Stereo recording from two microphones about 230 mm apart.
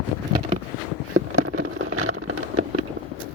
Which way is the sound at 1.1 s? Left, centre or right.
Right.